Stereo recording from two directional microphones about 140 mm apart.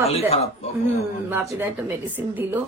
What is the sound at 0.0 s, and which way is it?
Speech, 45° left (ahead or behind).